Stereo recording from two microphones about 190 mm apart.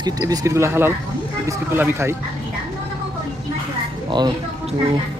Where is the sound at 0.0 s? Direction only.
20° right (ahead or behind).